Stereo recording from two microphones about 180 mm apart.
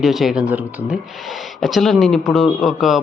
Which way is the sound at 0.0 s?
Centre (ahead or behind).